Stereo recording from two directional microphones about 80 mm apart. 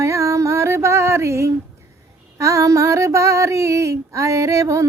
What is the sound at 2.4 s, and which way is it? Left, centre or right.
Female singing, right.